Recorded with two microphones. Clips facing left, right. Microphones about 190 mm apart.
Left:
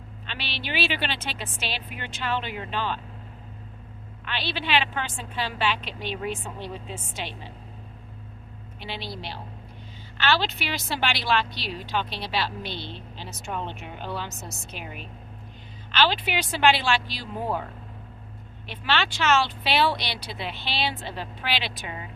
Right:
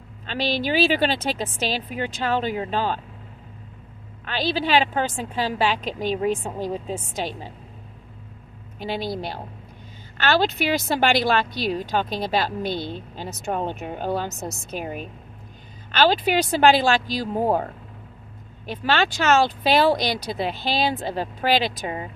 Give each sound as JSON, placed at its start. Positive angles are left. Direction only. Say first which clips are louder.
{"t": 0.3, "sound": "a woman's voice", "louder": "right 11 dB", "side_deg": -40}
{"t": 4.3, "sound": "a woman's voice", "louder": "right 6 dB", "side_deg": -40}
{"t": 8.8, "sound": "a woman's voice", "louder": "right 9 dB", "side_deg": -45}